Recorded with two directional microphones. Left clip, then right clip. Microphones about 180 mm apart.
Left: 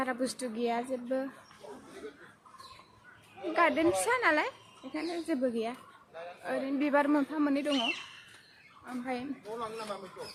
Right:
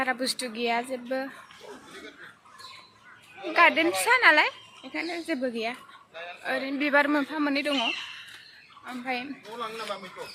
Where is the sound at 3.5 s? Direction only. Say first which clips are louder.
Right 6 dB; 10° left (ahead or behind).